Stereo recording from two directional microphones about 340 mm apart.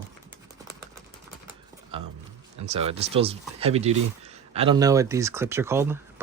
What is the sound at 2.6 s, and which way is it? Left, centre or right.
Speech, centre.